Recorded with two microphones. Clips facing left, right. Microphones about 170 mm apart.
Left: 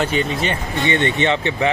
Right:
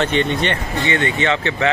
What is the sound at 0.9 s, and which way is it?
Speech, 20° left (ahead or behind).